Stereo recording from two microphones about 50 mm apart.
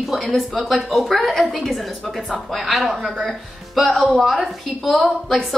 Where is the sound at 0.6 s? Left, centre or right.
Centre.